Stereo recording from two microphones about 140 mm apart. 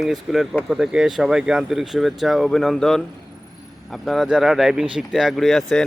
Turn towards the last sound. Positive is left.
turn(degrees=5)  # may be behind; listen again after turning